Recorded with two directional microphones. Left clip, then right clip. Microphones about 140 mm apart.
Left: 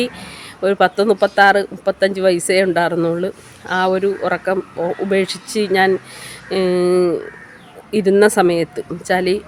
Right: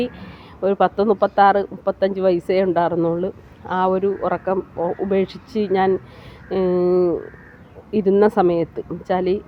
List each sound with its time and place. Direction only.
0.0 s speech: 30° left (ahead or behind)